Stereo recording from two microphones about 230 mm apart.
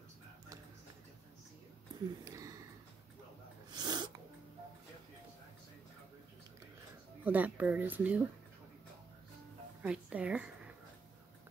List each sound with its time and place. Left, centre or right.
2.2 s a sound: centre
3.7 s sneeze: centre
7.2 s speech: centre
9.8 s a woman's voice: centre